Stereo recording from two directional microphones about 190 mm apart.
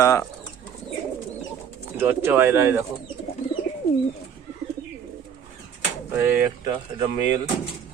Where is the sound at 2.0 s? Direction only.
10° right (ahead or behind).